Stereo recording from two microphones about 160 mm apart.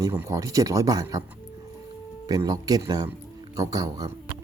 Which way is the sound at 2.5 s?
25° right (ahead or behind).